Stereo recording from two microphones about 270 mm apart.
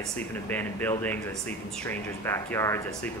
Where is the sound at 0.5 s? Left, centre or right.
Centre.